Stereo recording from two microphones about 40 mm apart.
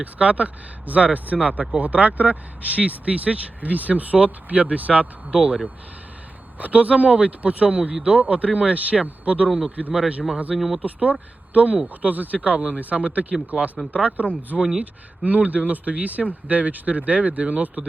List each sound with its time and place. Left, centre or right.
0.0 s speech: right
6.6 s speech: right
9.8 s speech: right
10.5 s speech: centre
10.8 s speech: right
12.4 s speech: right
13.5 s speech: centre
13.9 s speech: right
14.5 s speech: centre
15.2 s speech: right